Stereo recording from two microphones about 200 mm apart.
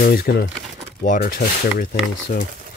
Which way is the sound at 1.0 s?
40° left (ahead or behind).